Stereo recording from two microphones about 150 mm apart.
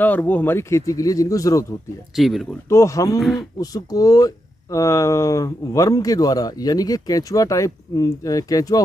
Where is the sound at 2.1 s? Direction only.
Centre (ahead or behind).